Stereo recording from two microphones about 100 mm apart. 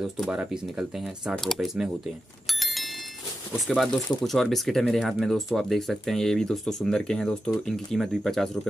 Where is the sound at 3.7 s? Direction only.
Centre (ahead or behind).